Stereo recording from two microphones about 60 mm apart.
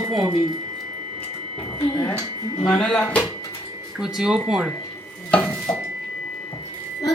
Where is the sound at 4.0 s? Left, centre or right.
Centre.